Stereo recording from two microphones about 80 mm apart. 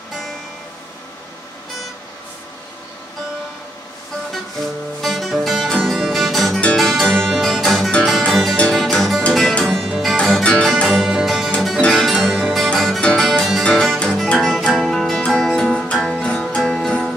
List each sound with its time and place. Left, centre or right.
5.0 s music: centre